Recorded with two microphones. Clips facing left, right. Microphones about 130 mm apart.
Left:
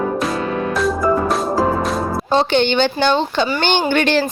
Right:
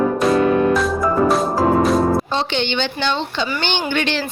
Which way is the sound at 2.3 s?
45° left (ahead or behind).